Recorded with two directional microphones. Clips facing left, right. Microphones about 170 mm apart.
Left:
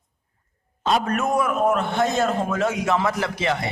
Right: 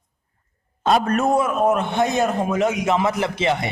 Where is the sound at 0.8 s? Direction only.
45° right (ahead or behind).